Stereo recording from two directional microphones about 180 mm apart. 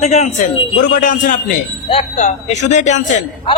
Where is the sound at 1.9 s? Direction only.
35° left (ahead or behind).